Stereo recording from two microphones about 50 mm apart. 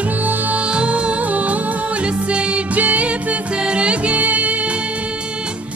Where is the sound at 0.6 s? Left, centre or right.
Right.